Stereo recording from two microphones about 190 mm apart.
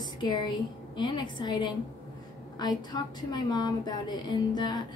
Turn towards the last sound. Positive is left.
turn(degrees=20)  # may be behind; listen again after turning